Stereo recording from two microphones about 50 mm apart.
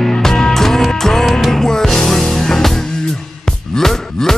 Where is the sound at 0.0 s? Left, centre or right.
Centre.